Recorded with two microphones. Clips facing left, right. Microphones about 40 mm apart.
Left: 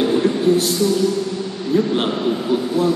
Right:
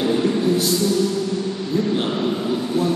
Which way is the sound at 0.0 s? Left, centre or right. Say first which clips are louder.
Left 3 dB; left.